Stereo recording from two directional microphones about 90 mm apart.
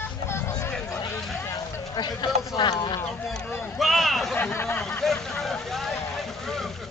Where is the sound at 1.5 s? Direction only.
50° left (ahead or behind).